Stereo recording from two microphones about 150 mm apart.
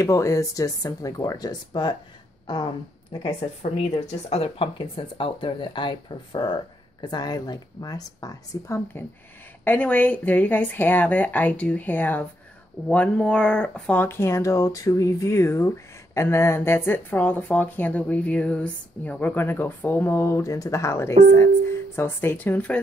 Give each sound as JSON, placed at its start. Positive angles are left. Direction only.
{"t": 0.0, "sound": "a woman's voice", "side_deg": 20}